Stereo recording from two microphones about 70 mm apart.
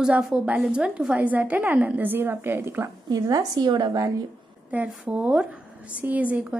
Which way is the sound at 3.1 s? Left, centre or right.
Right.